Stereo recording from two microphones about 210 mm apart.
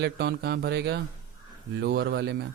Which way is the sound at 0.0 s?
50° right (ahead or behind).